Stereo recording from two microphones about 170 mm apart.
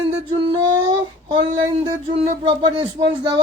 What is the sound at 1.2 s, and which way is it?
Speech, 30° right (ahead or behind).